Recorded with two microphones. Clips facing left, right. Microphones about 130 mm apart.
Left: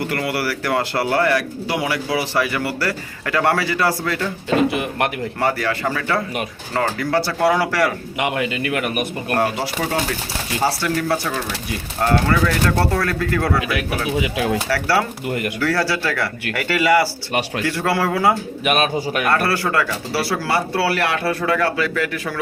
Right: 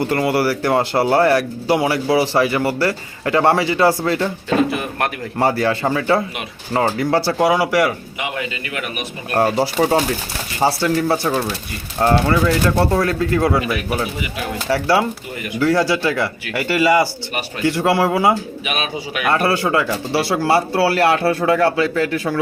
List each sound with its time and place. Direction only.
0.1 s speech: 25° right (ahead or behind)
4.7 s speech: 20° left (ahead or behind)
5.4 s speech: 30° right (ahead or behind)
7.3 s speech: 10° right (ahead or behind)
8.2 s a man's voice: 65° left (ahead or behind)
9.4 s speech: 30° right (ahead or behind)
13.6 s speech: 90° left
14.7 s speech: 20° right (ahead or behind)
15.3 s a man's voice: 55° left (ahead or behind)
15.6 s speech: 20° right (ahead or behind)
18.6 s a man's voice: 45° left (ahead or behind)
19.3 s speech: 20° right (ahead or behind)